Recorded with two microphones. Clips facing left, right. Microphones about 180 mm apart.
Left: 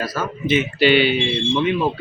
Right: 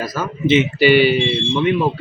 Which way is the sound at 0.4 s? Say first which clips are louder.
Right 5 dB; 25° right (ahead or behind).